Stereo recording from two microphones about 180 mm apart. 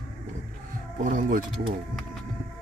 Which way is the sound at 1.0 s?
45° right (ahead or behind).